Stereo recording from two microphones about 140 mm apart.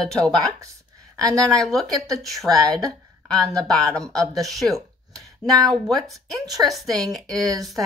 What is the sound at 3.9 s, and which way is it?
Speech, 5° left (ahead or behind).